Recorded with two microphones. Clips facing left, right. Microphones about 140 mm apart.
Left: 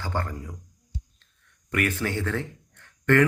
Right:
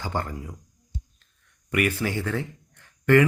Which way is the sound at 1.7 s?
10° right (ahead or behind).